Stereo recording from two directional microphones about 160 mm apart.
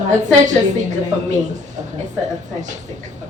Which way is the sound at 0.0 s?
50° right (ahead or behind).